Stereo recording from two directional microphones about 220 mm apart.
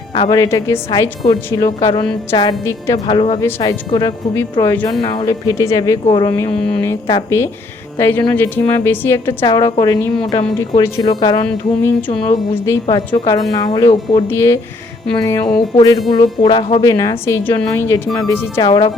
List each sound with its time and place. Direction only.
0.1 s a woman's voice: 20° left (ahead or behind)
3.1 s speech: 25° left (ahead or behind)
3.4 s a woman's voice: 15° left (ahead or behind)
11.4 s a woman's voice: 5° left (ahead or behind)